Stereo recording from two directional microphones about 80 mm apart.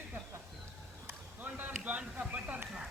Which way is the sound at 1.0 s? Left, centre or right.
Right.